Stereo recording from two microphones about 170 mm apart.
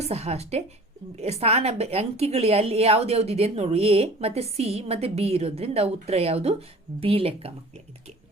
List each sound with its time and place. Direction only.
0.0 s a woman's voice: 40° right (ahead or behind)